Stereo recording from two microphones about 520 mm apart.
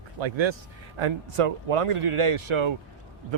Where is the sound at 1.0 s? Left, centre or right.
Right.